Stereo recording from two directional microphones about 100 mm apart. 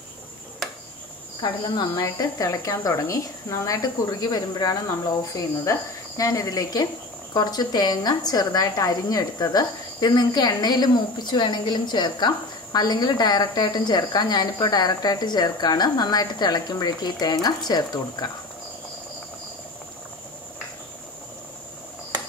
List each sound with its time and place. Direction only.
1.4 s a woman's voice: 40° left (ahead or behind)